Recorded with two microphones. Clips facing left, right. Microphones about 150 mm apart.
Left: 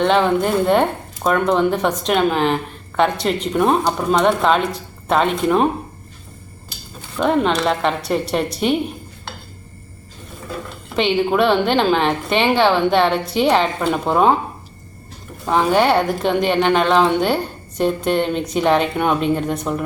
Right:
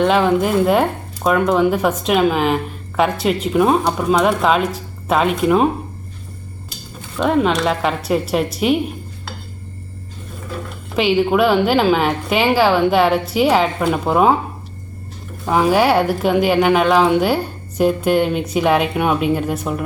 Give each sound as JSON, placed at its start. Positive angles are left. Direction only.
{"t": 0.0, "sound": "speech", "side_deg": -5}
{"t": 7.2, "sound": "speech", "side_deg": 0}
{"t": 10.9, "sound": "speech", "side_deg": -5}
{"t": 15.4, "sound": "speech", "side_deg": -5}